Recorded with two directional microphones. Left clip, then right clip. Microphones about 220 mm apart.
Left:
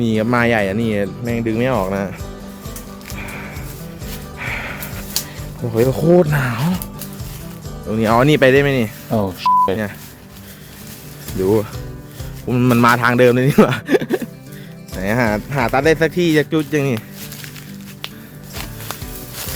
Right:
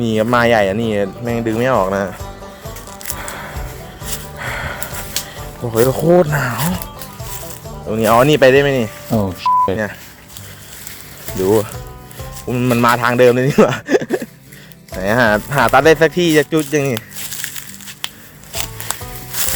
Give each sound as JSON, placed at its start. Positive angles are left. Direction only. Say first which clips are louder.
{"t": 0.0, "sound": "speech", "louder": "right 3 dB", "side_deg": 5}
{"t": 3.2, "sound": "music", "louder": "right 1 dB", "side_deg": 0}
{"t": 5.7, "sound": "speech", "louder": "right 2 dB", "side_deg": 10}
{"t": 7.9, "sound": "speech", "louder": "right 3 dB", "side_deg": 5}
{"t": 9.1, "sound": "speech", "louder": "even", "side_deg": 0}
{"t": 11.4, "sound": "speech", "louder": "right 2 dB", "side_deg": 5}
{"t": 12.5, "sound": "speech", "louder": "even", "side_deg": 15}
{"t": 15.0, "sound": "speech", "louder": "right 5 dB", "side_deg": 0}
{"t": 16.9, "sound": "a sound", "louder": "right 2 dB", "side_deg": -50}
{"t": 18.5, "sound": "music", "louder": "right 5 dB", "side_deg": -50}